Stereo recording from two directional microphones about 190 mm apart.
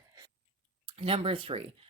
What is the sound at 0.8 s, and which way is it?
Speech, 30° right (ahead or behind).